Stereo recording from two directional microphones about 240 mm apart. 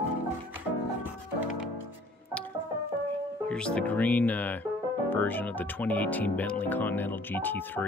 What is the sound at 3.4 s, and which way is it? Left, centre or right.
Speech, centre.